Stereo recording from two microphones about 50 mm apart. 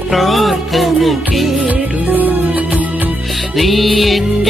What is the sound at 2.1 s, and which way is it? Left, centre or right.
Music, right.